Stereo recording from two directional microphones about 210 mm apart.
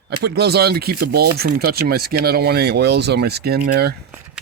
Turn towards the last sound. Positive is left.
turn(degrees=-50)  # may be behind; listen again after turning